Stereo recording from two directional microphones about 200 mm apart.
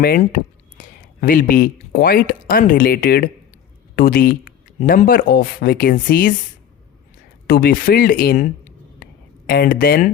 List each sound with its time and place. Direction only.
0.0 s speech: 45° left (ahead or behind)
7.4 s speech: 50° left (ahead or behind)
9.0 s a sound: 45° left (ahead or behind)
9.5 s speech: 45° left (ahead or behind)